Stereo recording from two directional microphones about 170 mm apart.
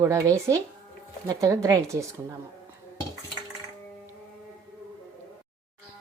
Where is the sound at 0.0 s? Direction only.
20° right (ahead or behind).